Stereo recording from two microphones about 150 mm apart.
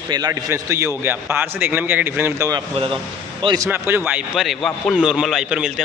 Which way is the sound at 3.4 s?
25° right (ahead or behind).